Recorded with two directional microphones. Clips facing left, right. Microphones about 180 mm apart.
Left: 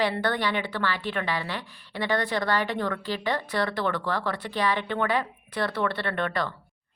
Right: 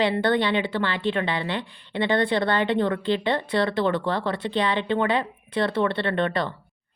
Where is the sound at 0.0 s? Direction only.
25° right (ahead or behind).